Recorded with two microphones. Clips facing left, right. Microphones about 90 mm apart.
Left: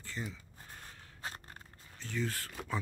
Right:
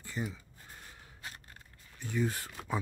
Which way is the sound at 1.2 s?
35° left (ahead or behind).